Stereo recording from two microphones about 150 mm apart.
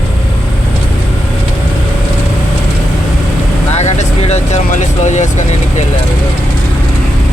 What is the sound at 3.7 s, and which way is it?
Vehicle, 50° left (ahead or behind).